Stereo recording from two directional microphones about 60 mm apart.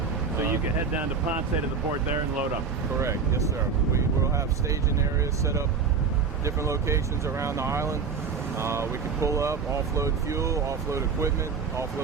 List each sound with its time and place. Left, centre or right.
3.0 s speech: right
6.4 s speech: right